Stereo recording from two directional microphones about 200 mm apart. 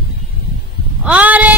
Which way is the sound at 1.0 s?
5° right (ahead or behind).